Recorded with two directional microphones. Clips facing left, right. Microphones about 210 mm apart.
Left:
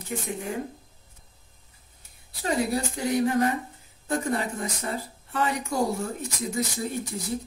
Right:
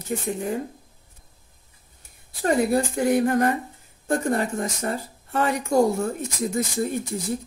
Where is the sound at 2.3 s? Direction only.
50° right (ahead or behind).